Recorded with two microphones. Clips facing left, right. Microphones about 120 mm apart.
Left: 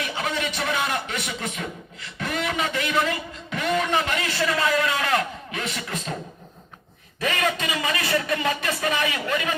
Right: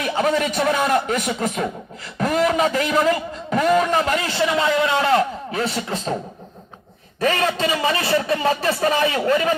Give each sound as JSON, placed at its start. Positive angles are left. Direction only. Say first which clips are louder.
{"t": 0.0, "sound": "speech", "louder": "right 8 dB", "side_deg": -45}
{"t": 2.1, "sound": "a sound", "louder": "right 8 dB", "side_deg": -40}
{"t": 7.2, "sound": "a man's voice", "louder": "right 5 dB", "side_deg": -35}